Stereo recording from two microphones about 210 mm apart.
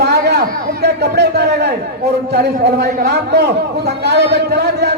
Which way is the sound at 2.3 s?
50° right (ahead or behind).